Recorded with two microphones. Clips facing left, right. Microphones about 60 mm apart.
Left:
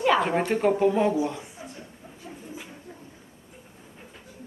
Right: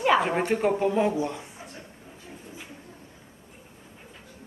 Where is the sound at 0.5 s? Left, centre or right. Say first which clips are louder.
Left 2 dB; centre.